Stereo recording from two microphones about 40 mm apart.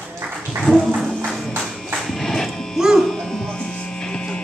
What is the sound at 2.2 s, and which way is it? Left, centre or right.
Music, centre.